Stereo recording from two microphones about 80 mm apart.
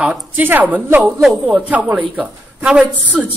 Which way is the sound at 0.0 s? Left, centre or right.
Right.